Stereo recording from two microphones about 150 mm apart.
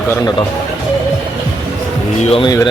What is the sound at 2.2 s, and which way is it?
Speech, 40° left (ahead or behind).